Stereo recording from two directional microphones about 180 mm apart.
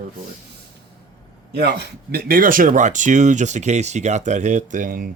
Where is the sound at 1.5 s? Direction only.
65° right (ahead or behind).